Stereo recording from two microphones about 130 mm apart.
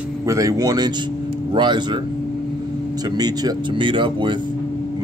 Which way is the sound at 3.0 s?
30° right (ahead or behind).